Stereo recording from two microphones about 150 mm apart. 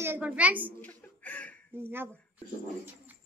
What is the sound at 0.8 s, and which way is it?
Speech, 10° left (ahead or behind).